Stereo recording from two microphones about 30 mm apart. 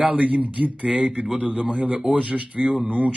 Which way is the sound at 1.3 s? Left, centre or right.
Right.